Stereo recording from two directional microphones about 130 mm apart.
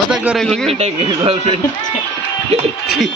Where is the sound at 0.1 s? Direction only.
5° right (ahead or behind).